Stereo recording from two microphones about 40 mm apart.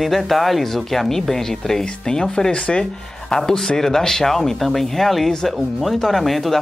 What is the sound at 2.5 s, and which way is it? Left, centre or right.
Speech, left.